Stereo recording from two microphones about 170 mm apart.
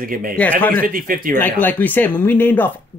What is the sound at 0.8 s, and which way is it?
Speech, 55° right (ahead or behind).